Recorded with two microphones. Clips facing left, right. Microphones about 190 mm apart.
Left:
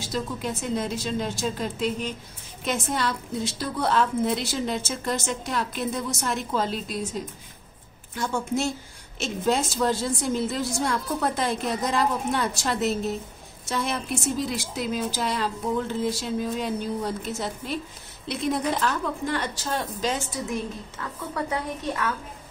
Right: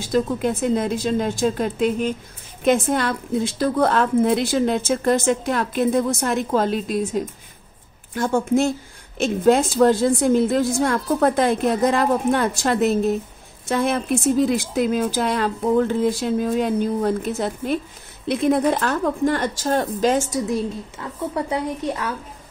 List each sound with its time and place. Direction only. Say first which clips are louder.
0.0 s a woman's voice: right 9 dB; 50° right (ahead or behind)
21.0 s a woman's voice: right 5 dB; 25° right (ahead or behind)